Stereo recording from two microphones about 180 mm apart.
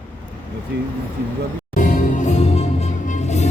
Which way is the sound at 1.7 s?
45° left (ahead or behind).